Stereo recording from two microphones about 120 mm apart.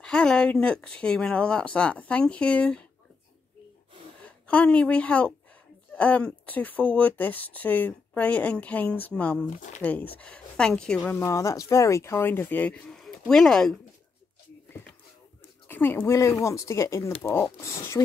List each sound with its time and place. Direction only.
0.0 s speech: 5° left (ahead or behind)
4.5 s speech: 10° left (ahead or behind)
9.6 s speech: 90° left
9.8 s speech: 15° left (ahead or behind)
11.1 s speech: 25° left (ahead or behind); by 13.7 s 5° left (ahead or behind)
15.7 s speech: 20° left (ahead or behind)